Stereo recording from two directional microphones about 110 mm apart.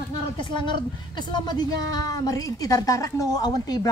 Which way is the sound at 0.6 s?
45° left (ahead or behind).